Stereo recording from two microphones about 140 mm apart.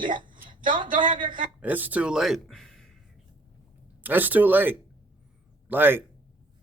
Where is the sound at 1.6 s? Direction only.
10° right (ahead or behind).